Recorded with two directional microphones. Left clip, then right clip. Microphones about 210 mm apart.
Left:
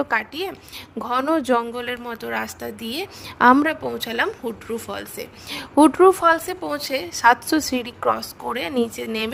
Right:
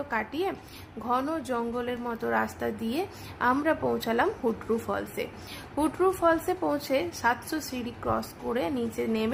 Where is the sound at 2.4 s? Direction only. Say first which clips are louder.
Left 1 dB; centre (ahead or behind).